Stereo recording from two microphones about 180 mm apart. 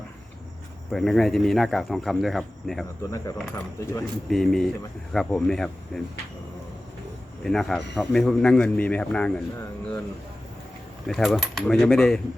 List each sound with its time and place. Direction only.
0.9 s a man's voice: centre (ahead or behind)
3.1 s speech: 15° left (ahead or behind)
4.3 s a man's voice: centre (ahead or behind)
7.4 s a man's voice: centre (ahead or behind)
11.1 s a man's voice: centre (ahead or behind)